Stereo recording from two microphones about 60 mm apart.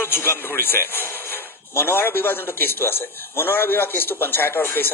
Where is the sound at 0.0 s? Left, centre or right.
Left.